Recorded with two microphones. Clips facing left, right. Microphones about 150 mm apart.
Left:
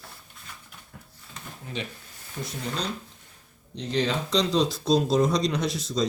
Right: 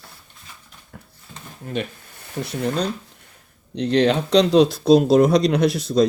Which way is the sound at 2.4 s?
70° right (ahead or behind).